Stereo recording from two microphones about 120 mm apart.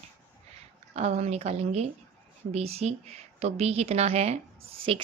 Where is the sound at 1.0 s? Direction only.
60° right (ahead or behind).